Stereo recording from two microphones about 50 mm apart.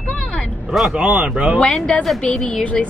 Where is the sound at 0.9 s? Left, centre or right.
Centre.